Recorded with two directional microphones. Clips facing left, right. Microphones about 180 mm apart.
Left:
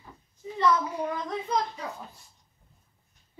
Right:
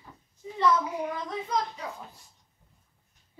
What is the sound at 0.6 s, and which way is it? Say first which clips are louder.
Speech: even; 10° right (ahead or behind).